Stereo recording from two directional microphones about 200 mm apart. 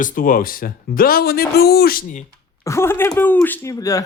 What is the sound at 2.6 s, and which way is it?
Speech, 15° left (ahead or behind).